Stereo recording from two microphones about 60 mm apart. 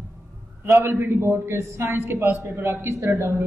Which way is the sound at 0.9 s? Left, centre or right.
Right.